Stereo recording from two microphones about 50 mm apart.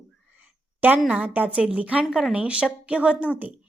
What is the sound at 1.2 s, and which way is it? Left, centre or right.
Speech, right.